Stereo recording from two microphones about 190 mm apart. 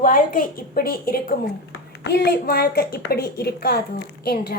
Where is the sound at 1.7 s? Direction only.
60° left (ahead or behind).